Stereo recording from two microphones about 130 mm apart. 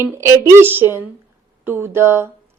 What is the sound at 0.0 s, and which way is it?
A woman's voice, 20° right (ahead or behind).